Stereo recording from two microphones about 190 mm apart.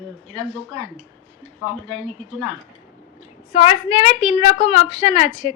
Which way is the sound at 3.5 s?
30° left (ahead or behind).